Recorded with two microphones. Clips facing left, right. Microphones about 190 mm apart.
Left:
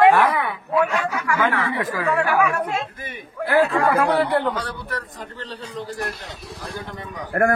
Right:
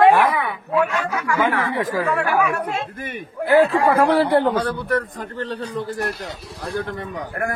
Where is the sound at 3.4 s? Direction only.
25° right (ahead or behind).